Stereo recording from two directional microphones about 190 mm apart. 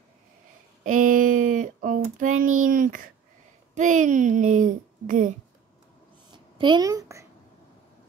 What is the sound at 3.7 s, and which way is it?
Speech, 40° right (ahead or behind).